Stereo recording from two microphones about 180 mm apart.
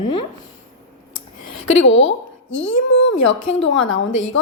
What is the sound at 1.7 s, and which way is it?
A woman's voice, 90° left.